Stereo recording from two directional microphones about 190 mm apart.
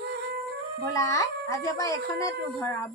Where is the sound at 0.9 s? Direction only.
15° left (ahead or behind).